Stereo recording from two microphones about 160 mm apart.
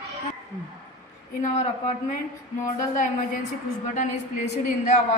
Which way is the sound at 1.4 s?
40° left (ahead or behind).